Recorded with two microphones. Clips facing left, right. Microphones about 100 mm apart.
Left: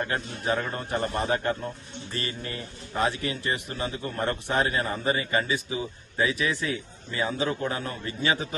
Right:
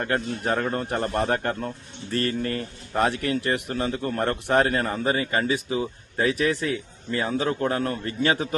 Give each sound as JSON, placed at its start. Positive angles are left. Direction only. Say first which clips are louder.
{"t": 0.1, "sound": "a man's voice", "louder": "right 3 dB", "side_deg": -50}